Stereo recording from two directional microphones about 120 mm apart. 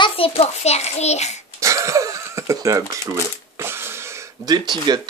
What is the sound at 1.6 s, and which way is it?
Throat clearing, 25° right (ahead or behind).